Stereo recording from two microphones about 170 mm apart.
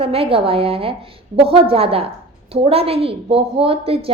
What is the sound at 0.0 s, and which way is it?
A woman's voice, 35° right (ahead or behind).